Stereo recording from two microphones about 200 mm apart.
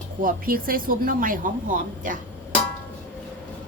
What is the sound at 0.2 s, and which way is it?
Speech, 45° right (ahead or behind).